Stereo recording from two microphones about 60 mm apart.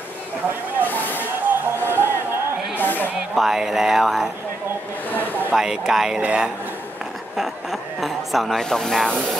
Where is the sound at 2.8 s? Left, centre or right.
Left.